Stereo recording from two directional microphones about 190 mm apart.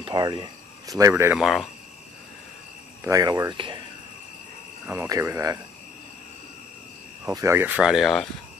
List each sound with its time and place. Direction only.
0.0 s speech: 25° right (ahead or behind)
1.4 s speech: centre (ahead or behind)
3.0 s speech: 20° right (ahead or behind)
4.8 s speech: 15° right (ahead or behind)
7.2 s speech: 15° right (ahead or behind)